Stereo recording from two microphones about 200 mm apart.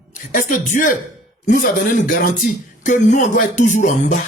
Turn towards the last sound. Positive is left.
turn(degrees=35)  # may be behind; listen again after turning